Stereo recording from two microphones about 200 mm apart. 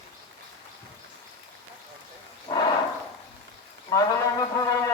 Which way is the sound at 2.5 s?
20° left (ahead or behind).